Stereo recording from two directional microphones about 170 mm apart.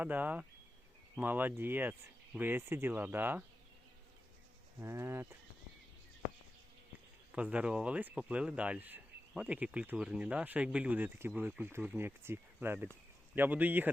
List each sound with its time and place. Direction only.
0.0 s speech: 10° right (ahead or behind)
4.8 s speech: 15° right (ahead or behind)
7.3 s speech: 5° right (ahead or behind)